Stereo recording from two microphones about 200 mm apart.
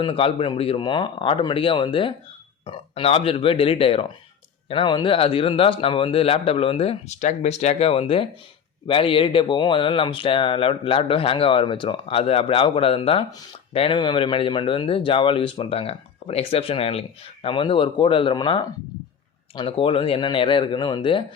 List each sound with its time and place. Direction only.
0.0 s a man's voice: 25° left (ahead or behind)